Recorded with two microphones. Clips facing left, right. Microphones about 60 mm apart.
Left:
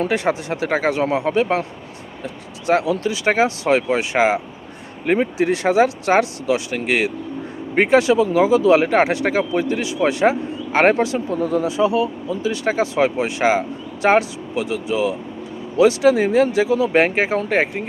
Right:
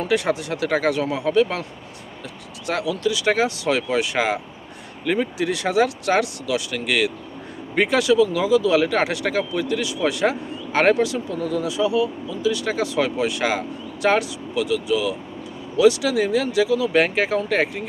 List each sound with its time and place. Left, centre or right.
0.1 s speech: left
2.6 s speech: left